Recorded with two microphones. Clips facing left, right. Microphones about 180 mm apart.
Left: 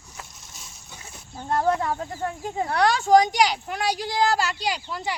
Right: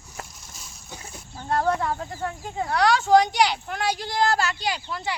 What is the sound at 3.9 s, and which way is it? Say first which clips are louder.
Speech: left 1 dB; 10° left (ahead or behind).